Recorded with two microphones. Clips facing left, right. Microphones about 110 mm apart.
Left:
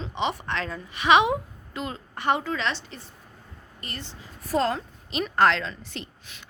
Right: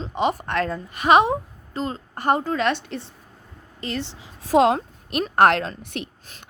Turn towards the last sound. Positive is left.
turn(degrees=-65)  # may be behind; listen again after turning